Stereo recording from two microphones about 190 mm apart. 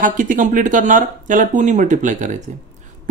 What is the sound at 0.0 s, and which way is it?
Speech, 45° right (ahead or behind).